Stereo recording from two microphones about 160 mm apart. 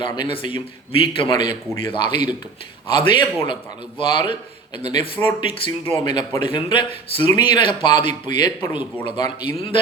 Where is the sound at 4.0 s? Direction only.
30° left (ahead or behind).